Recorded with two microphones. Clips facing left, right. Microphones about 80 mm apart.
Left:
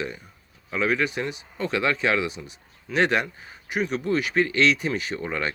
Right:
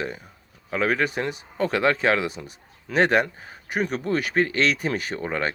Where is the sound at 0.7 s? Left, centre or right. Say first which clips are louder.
Right 1 dB; right.